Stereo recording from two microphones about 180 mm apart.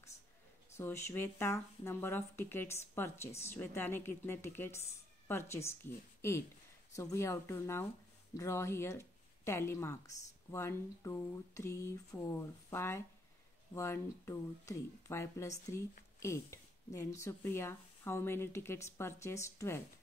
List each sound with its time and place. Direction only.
0.7 s speech: 15° left (ahead or behind)